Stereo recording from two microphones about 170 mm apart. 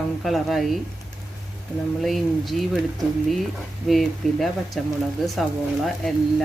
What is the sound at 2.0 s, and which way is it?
Speech, centre (ahead or behind).